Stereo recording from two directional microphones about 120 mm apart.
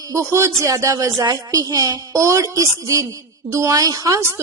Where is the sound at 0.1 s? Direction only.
25° right (ahead or behind).